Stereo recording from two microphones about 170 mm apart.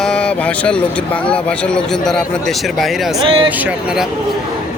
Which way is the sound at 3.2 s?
30° right (ahead or behind).